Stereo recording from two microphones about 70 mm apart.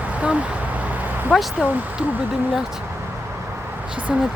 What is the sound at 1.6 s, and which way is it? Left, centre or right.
Speech, centre.